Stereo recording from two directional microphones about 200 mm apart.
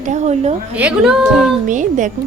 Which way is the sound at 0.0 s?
35° right (ahead or behind).